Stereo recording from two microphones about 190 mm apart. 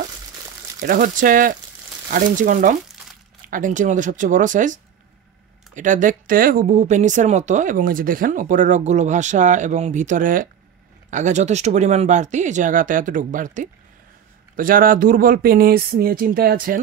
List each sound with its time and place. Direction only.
0.8 s speech: 45° right (ahead or behind)
5.8 s speech: 40° right (ahead or behind)